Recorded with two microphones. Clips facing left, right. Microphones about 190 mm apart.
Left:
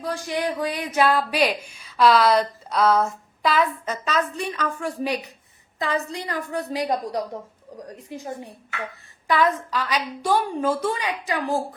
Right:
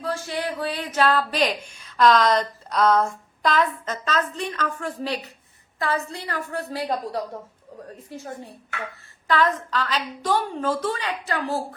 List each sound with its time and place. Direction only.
0.0 s speech: 15° left (ahead or behind)